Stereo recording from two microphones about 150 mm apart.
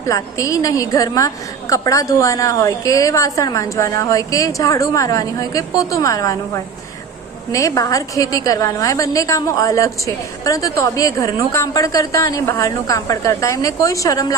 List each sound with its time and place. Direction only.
0.1 s a woman's voice: 20° left (ahead or behind)